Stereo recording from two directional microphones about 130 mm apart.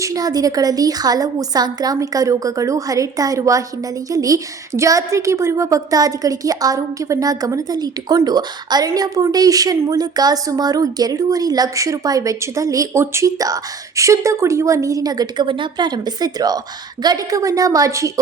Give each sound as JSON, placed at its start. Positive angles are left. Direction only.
{"t": 0.0, "sound": "a woman's voice", "side_deg": -25}